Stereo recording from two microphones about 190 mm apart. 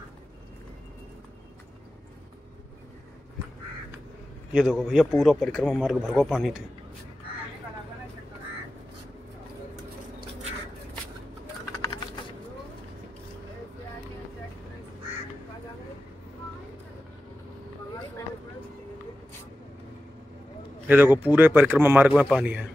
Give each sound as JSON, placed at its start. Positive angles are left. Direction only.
{"t": 4.5, "sound": "speech", "side_deg": -5}
{"t": 20.8, "sound": "speech", "side_deg": -10}